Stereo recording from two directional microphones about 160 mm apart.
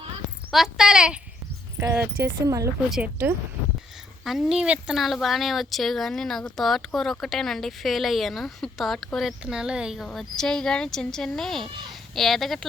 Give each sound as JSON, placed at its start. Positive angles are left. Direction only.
{"t": 0.5, "sound": "speech", "side_deg": -5}
{"t": 4.2, "sound": "speech", "side_deg": 0}